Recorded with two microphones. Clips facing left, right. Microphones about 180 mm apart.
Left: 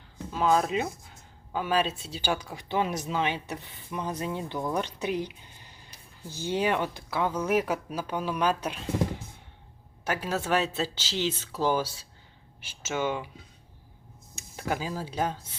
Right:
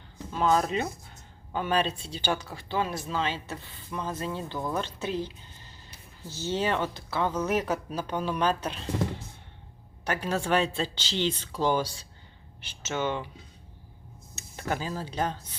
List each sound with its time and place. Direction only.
0.3 s speech: 5° left (ahead or behind)
14.3 s speech: 10° left (ahead or behind)